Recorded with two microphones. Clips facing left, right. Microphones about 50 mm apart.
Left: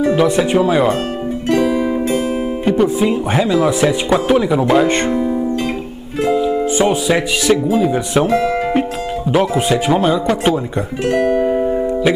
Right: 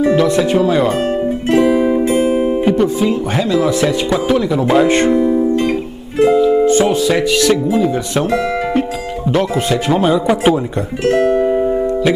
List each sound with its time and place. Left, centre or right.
0.0 s speech: centre
1.7 s music: centre
2.6 s speech: centre
4.6 s speech: centre
6.1 s music: centre
6.6 s speech: centre
11.1 s music: centre